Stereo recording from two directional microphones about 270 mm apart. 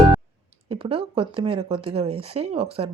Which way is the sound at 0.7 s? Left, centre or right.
Centre.